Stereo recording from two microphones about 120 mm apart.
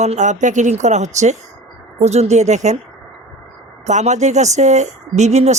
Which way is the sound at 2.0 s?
65° right (ahead or behind).